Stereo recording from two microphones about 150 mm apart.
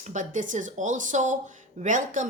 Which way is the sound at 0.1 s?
60° right (ahead or behind).